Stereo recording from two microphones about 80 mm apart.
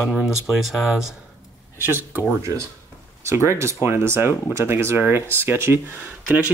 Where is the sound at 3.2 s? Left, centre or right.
Right.